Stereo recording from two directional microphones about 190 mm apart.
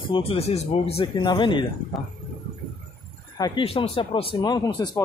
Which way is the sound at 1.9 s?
Centre (ahead or behind).